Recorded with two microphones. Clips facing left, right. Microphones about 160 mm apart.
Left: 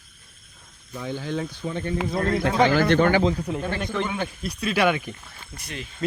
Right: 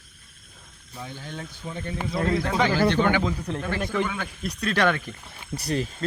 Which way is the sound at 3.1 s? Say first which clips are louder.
Left 4 dB; 30° left (ahead or behind).